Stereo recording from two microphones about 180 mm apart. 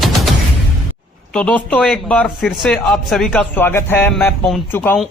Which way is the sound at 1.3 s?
5° left (ahead or behind).